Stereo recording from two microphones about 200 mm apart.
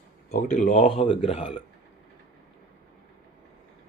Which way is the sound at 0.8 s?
25° left (ahead or behind).